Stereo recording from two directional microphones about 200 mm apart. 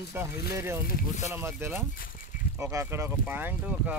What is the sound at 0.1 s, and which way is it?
Speech, 15° right (ahead or behind).